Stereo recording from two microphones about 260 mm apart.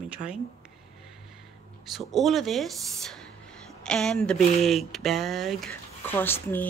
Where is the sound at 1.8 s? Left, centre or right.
Centre.